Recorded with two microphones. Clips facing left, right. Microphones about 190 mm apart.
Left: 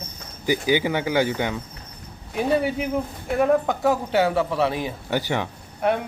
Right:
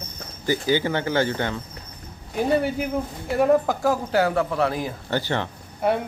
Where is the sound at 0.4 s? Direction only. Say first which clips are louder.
Left 1 dB; 15° left (ahead or behind).